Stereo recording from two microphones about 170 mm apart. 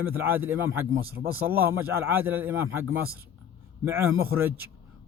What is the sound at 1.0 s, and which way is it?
Speech, 60° right (ahead or behind).